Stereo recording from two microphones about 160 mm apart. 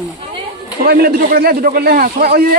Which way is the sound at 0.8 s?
70° right (ahead or behind).